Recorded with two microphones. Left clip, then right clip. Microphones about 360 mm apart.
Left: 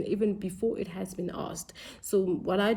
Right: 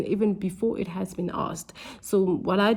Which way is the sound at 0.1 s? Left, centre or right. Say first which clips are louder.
Right 2 dB; centre.